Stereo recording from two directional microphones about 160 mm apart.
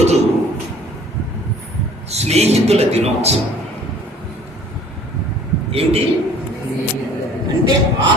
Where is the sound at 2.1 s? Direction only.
40° right (ahead or behind).